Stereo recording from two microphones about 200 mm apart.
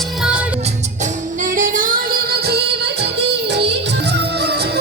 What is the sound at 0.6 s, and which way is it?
Music, 35° right (ahead or behind).